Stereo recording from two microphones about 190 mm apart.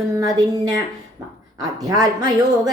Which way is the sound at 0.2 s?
20° right (ahead or behind).